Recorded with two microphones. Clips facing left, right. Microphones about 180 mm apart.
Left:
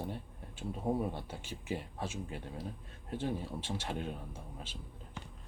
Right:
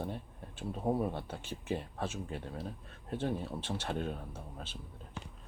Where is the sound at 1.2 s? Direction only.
10° left (ahead or behind).